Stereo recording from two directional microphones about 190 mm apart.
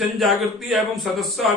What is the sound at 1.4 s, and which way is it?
Speech, centre (ahead or behind).